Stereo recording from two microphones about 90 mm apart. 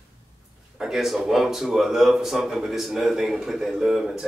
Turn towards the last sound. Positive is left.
turn(degrees=-5)  # may be behind; listen again after turning